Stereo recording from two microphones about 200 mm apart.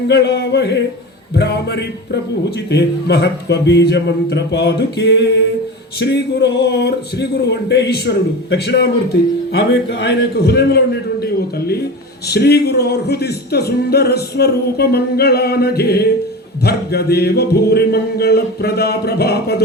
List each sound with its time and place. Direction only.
0.1 s a man's voice: 60° left (ahead or behind)